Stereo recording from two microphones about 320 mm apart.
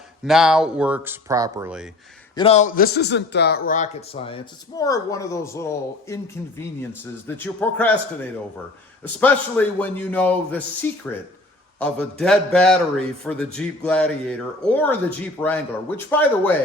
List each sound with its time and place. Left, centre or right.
0.3 s a man's voice: centre
2.3 s a man's voice: centre
7.3 s a man's voice: centre
9.2 s a man's voice: centre